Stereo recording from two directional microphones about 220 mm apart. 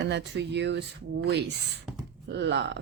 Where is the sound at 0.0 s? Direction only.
50° right (ahead or behind).